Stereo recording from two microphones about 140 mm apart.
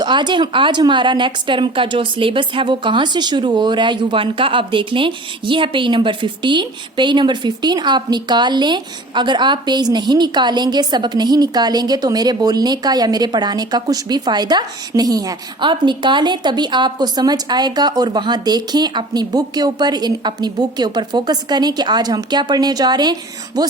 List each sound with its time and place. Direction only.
0.0 s speech: 35° right (ahead or behind)